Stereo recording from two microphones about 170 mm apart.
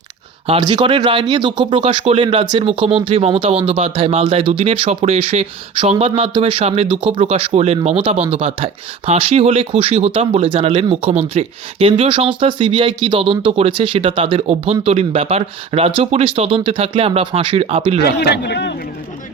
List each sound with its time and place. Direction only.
0.4 s speech: 30° right (ahead or behind)
18.0 s speech: 70° left (ahead or behind)